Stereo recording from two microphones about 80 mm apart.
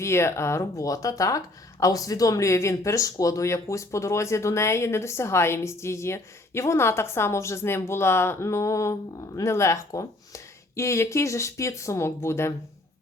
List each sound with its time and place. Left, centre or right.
0.0 s speech: left